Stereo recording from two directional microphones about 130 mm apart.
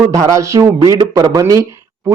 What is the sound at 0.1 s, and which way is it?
Speech, 25° right (ahead or behind).